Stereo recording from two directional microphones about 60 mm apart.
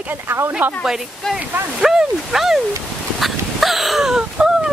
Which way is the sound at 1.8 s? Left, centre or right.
Centre.